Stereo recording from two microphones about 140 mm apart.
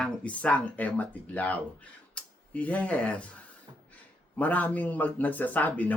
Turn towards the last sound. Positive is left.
turn(degrees=10)  # may be behind; listen again after turning